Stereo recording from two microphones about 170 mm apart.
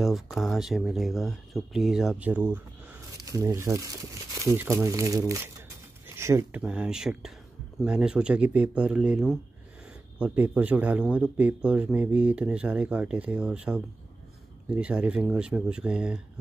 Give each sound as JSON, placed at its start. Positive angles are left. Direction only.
{"t": 0.0, "sound": "speech", "side_deg": 0}